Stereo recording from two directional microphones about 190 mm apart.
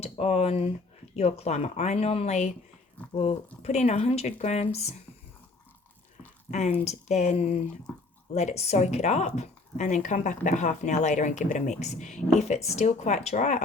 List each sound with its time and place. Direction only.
0.0 s speech: 35° left (ahead or behind)
6.5 s speech: 35° left (ahead or behind)